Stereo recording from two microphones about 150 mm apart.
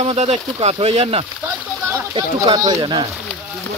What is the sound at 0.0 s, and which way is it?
Speech, 45° right (ahead or behind).